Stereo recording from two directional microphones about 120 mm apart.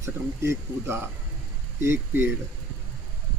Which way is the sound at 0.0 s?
20° right (ahead or behind).